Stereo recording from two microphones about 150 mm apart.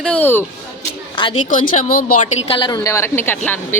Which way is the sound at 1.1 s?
30° left (ahead or behind).